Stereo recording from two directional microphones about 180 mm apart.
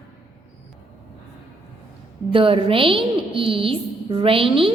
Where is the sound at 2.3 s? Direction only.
30° right (ahead or behind).